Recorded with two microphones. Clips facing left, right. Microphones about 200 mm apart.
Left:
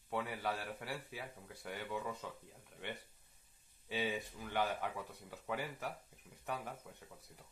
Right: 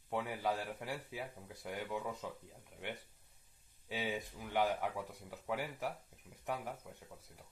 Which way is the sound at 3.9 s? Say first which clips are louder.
Left 1 dB; 10° right (ahead or behind).